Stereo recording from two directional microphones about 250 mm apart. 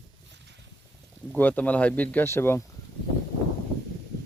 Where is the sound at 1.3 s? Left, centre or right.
Centre.